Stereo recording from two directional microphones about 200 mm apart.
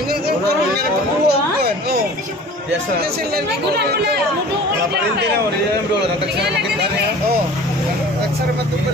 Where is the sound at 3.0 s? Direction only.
50° right (ahead or behind).